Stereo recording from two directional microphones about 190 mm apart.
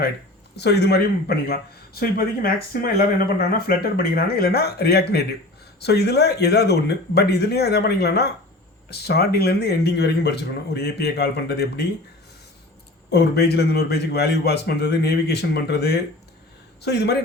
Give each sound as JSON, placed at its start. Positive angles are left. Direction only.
{"t": 0.5, "sound": "a man's voice", "side_deg": 60}
{"t": 13.1, "sound": "speech", "side_deg": 60}